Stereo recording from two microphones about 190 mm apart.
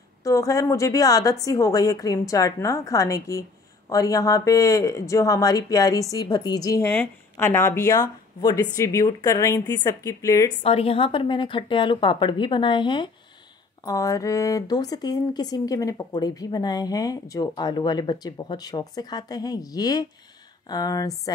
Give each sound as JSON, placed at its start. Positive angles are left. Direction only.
{"t": 0.2, "sound": "speech", "side_deg": 15}
{"t": 10.6, "sound": "speech", "side_deg": 30}